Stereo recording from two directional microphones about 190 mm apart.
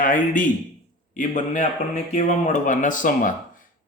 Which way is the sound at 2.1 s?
40° left (ahead or behind).